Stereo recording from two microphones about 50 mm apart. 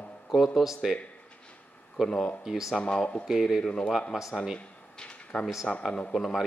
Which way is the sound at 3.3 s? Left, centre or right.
Centre.